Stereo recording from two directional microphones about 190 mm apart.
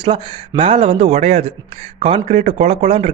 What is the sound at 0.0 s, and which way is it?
A man's voice, 25° right (ahead or behind).